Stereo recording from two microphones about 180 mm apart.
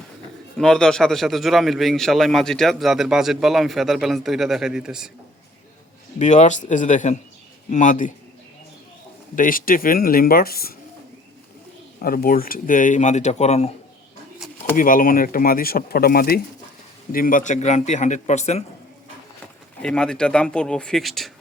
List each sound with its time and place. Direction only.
0.5 s a man's voice: 5° left (ahead or behind)
6.1 s speech: 40° left (ahead or behind)
9.3 s speech: 50° left (ahead or behind)
12.0 s speech: 55° left (ahead or behind); by 13.7 s 40° left (ahead or behind)
14.8 s speech: 50° left (ahead or behind)
19.8 s a man's voice: 5° left (ahead or behind)